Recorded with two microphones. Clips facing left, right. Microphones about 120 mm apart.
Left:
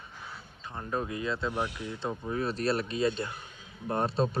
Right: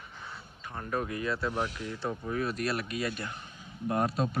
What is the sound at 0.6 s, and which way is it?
Speech, 20° left (ahead or behind).